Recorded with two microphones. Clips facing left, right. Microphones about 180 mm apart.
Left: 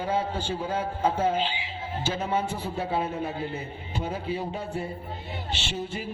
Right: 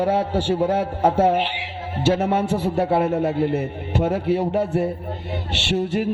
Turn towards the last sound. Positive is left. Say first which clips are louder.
# right 11 dB
turn(degrees=-70)  # may be behind; listen again after turning